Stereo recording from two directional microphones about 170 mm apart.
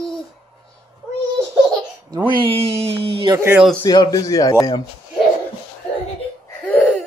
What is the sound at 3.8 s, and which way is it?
A man's voice, 25° left (ahead or behind).